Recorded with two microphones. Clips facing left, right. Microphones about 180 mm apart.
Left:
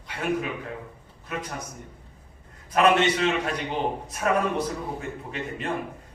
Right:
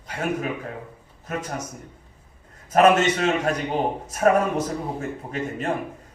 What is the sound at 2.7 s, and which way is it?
A man's voice, 45° right (ahead or behind).